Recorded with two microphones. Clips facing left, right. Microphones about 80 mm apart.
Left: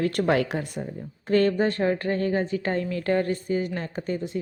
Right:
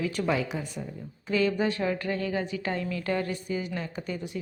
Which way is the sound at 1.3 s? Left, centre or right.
Left.